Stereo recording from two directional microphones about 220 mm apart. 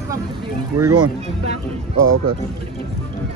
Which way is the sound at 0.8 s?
90° right.